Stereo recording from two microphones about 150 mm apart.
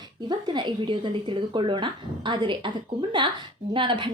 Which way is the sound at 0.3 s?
30° right (ahead or behind).